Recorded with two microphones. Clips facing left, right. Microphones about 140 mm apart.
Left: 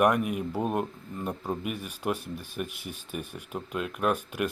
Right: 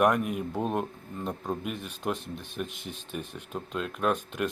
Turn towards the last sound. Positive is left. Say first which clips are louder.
# even
turn(degrees=10)  # may be behind; listen again after turning